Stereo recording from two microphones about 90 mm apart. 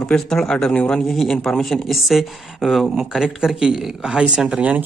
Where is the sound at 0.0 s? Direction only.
10° left (ahead or behind).